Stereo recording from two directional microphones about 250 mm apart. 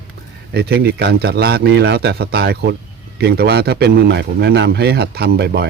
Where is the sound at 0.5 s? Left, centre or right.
Right.